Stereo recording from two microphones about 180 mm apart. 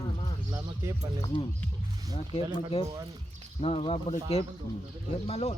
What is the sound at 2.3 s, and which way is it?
Speech, 30° left (ahead or behind).